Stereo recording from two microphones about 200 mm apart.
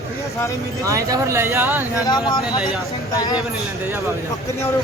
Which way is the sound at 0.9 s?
15° right (ahead or behind).